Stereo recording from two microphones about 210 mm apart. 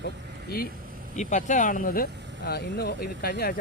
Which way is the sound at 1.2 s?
35° left (ahead or behind).